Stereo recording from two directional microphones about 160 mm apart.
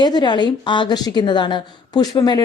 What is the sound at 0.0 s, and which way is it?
A woman's voice, 25° left (ahead or behind).